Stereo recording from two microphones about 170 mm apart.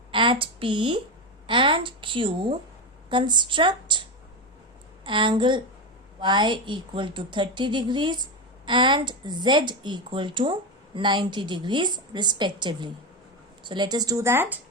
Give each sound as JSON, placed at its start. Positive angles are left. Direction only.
{"t": 0.1, "sound": "a woman's voice", "side_deg": -30}
{"t": 1.5, "sound": "a sound", "side_deg": -30}
{"t": 3.1, "sound": "speech", "side_deg": -25}
{"t": 5.0, "sound": "speech", "side_deg": -30}